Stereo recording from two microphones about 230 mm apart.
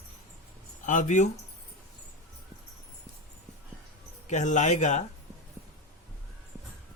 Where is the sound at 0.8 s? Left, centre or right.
Left.